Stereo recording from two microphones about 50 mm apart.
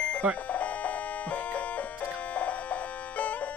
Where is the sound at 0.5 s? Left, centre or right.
Left.